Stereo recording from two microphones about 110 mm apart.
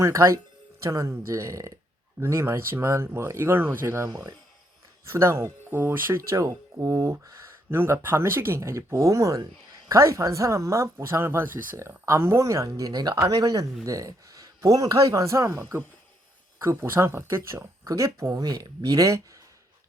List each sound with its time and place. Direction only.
0.0 s a man's voice: 25° right (ahead or behind)